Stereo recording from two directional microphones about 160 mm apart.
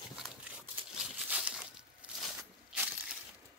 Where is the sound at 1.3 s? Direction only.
10° right (ahead or behind).